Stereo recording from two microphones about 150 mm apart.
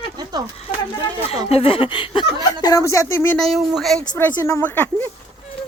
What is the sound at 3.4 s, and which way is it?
Speech, centre (ahead or behind).